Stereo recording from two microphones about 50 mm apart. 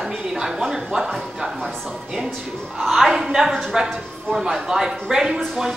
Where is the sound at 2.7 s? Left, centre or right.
Centre.